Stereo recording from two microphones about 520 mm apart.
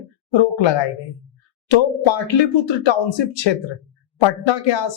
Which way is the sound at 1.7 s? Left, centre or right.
Left.